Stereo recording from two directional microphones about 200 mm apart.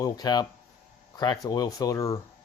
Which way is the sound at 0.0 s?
20° left (ahead or behind).